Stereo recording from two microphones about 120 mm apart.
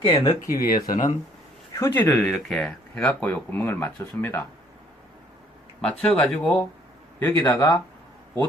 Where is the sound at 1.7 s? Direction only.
20° left (ahead or behind).